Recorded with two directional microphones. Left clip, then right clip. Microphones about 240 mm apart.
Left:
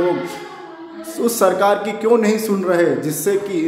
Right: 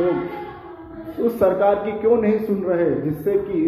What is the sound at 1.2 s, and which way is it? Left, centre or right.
A man's voice, centre.